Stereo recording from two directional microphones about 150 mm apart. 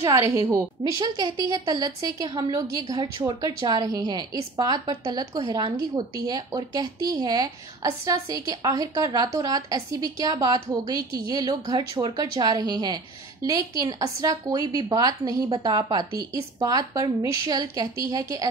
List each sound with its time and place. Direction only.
0.1 s a woman's voice: 25° right (ahead or behind)